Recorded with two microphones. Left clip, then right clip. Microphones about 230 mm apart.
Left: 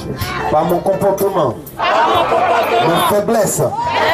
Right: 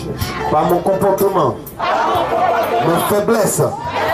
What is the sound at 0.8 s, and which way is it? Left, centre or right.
Speech, centre.